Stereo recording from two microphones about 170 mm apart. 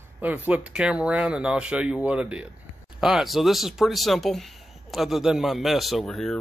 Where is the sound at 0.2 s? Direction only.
10° right (ahead or behind).